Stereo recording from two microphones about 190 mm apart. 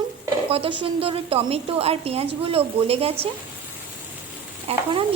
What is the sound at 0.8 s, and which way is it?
A woman's voice, 30° right (ahead or behind).